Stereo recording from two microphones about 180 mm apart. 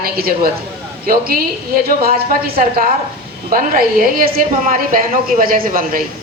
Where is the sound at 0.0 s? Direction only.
55° right (ahead or behind).